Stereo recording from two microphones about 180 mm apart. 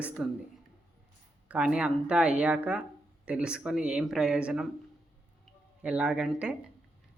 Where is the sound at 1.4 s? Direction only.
5° right (ahead or behind).